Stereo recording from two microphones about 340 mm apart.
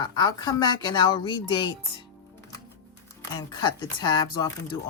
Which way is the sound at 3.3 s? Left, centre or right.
Centre.